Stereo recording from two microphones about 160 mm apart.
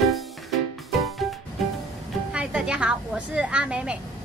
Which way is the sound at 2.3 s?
5° right (ahead or behind).